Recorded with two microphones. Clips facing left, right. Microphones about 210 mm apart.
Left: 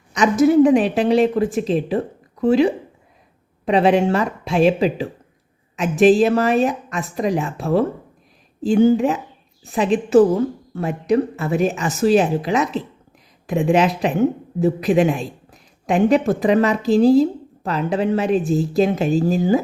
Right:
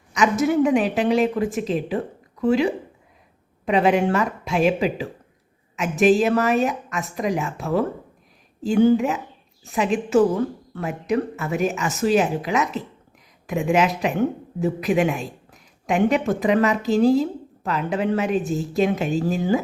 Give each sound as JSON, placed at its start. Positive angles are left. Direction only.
{"t": 0.1, "sound": "speech", "side_deg": 35}
{"t": 3.7, "sound": "speech", "side_deg": 35}